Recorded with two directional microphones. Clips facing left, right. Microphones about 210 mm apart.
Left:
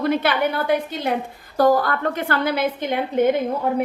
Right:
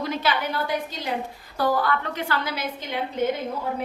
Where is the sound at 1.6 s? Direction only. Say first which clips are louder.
Left 6 dB; 45° left (ahead or behind).